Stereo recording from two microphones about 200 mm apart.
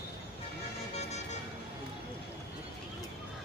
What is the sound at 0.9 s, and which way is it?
Vehicle, 35° left (ahead or behind).